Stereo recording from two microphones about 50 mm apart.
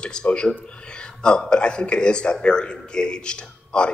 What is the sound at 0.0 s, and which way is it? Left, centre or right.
A man's voice, centre.